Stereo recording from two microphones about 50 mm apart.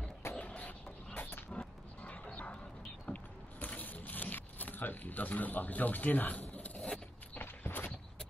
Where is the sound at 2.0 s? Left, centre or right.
Left.